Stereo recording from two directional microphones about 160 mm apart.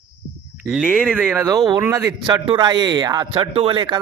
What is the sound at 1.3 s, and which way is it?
Speech, 20° right (ahead or behind).